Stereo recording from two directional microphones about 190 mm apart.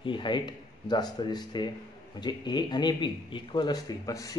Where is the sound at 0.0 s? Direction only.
25° left (ahead or behind).